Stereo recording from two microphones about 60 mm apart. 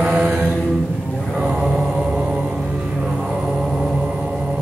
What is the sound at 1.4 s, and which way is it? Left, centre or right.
Mantra, right.